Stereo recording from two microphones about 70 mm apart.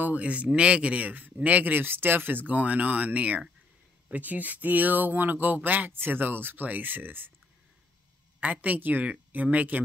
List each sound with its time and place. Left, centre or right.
0.0 s a man's voice: centre
8.4 s a man's voice: right